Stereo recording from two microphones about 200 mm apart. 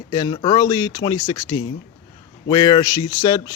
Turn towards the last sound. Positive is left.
turn(degrees=20)  # may be behind; listen again after turning